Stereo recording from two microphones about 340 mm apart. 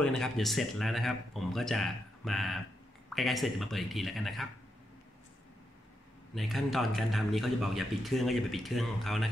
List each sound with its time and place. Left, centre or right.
0.0 s a man's voice: centre
6.3 s a man's voice: centre